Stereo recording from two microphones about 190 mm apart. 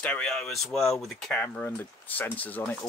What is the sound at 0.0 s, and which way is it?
Speech, 5° left (ahead or behind).